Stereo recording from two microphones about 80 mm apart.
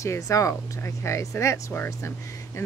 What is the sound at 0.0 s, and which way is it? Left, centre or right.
Speech, left.